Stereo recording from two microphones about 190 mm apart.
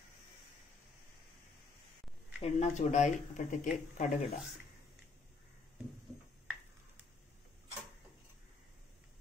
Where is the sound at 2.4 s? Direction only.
35° left (ahead or behind).